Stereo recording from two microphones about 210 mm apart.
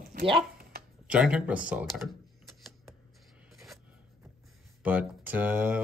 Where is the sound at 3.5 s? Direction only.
Centre (ahead or behind).